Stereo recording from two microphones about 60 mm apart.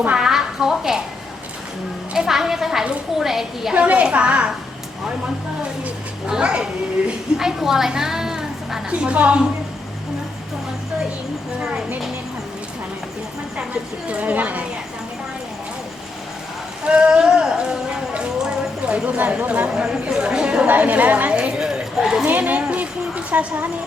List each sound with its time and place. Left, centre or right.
0.2 s a sound: centre
2.1 s a woman's voice: centre
3.8 s a woman's voice: centre
6.2 s a woman's voice: centre
8.9 s a woman's voice: centre
14.1 s a woman's voice: right
16.8 s a woman's voice: centre
19.0 s a woman's voice: right
19.7 s a woman's voice: centre
22.3 s a woman's voice: right
22.7 s a sound: right